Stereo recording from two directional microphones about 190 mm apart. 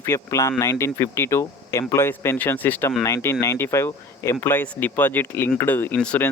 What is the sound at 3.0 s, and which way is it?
Speech, 15° left (ahead or behind).